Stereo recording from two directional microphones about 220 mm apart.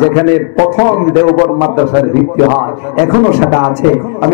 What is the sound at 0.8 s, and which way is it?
A man's voice, 25° left (ahead or behind).